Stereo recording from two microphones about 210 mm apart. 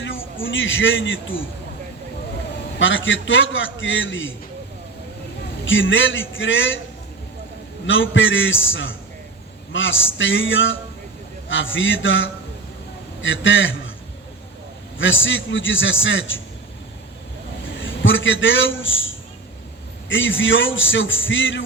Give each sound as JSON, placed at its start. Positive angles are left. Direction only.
{"t": 0.4, "sound": "a man's voice", "side_deg": 65}
{"t": 2.7, "sound": "a man's voice", "side_deg": 65}
{"t": 5.6, "sound": "a man's voice", "side_deg": 65}
{"t": 7.9, "sound": "a man's voice", "side_deg": 65}
{"t": 14.9, "sound": "a man's voice", "side_deg": 65}
{"t": 17.7, "sound": "a man's voice", "side_deg": 65}